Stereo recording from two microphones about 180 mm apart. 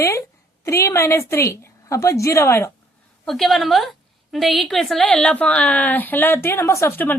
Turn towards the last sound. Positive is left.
turn(degrees=10)  # may be behind; listen again after turning